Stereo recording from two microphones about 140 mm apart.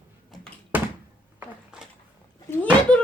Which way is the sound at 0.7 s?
10° right (ahead or behind).